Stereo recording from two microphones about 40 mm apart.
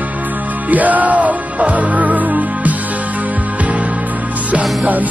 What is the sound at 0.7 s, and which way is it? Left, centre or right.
Music, right.